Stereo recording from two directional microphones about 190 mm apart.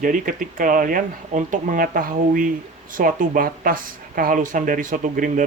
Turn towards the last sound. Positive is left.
turn(degrees=-45)  # may be behind; listen again after turning